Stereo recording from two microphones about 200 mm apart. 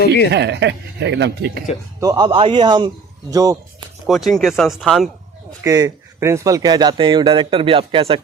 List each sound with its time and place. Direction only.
0.3 s speech: 60° right (ahead or behind)
2.0 s speech: 20° right (ahead or behind)
4.0 s speech: centre (ahead or behind)
5.6 s speech: 15° right (ahead or behind)